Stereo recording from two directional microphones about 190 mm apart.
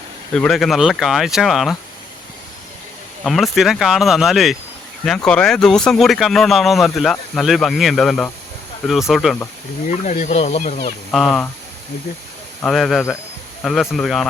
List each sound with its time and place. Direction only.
0.3 s speech: centre (ahead or behind)
3.2 s speech: centre (ahead or behind)
9.9 s speech: 40° left (ahead or behind)
11.1 s speech: centre (ahead or behind)
12.6 s speech: centre (ahead or behind)